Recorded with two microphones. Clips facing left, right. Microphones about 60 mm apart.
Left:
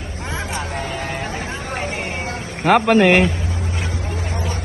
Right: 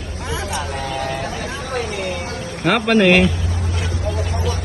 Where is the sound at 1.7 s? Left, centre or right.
Left.